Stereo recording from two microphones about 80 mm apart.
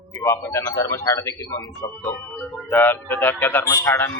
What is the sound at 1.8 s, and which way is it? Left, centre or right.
Speech, left.